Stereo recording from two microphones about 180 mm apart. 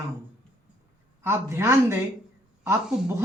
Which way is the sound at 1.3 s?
15° right (ahead or behind).